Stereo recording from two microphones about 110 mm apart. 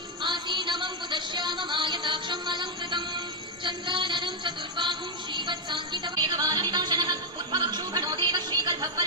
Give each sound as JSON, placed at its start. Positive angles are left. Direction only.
{"t": 0.2, "sound": "music", "side_deg": -45}